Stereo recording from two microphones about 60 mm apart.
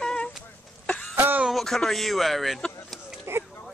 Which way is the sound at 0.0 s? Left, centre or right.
Centre.